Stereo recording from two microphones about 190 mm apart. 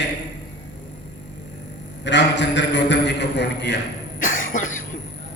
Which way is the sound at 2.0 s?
70° left (ahead or behind).